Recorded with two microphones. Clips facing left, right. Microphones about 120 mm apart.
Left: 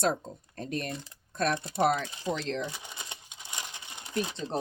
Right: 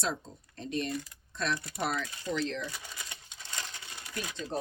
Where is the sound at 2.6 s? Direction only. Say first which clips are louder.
Left 4 dB; 20° left (ahead or behind).